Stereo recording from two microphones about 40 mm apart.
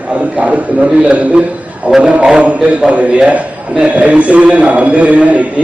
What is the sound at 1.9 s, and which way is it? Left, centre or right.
A man's voice, right.